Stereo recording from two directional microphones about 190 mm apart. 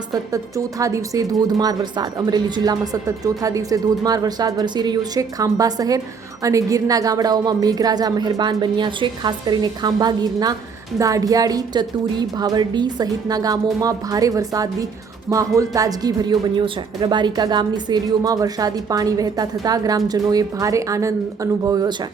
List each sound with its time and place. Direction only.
0.1 s speech: 15° right (ahead or behind)